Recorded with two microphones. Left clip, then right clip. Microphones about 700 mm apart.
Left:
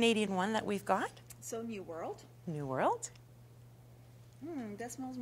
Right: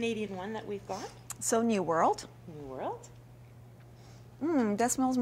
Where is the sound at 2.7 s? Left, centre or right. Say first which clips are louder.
Left 5 dB; left.